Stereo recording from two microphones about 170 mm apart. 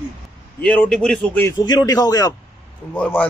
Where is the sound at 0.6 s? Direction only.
5° left (ahead or behind).